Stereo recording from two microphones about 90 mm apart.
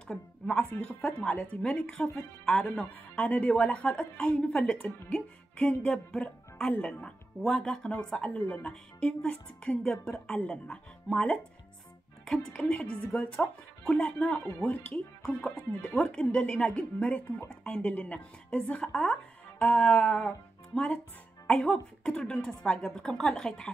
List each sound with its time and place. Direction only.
0.1 s a woman's voice: 5° left (ahead or behind)
0.7 s speech: 20° left (ahead or behind)
19.6 s music: 10° left (ahead or behind)
21.5 s speech: 10° left (ahead or behind)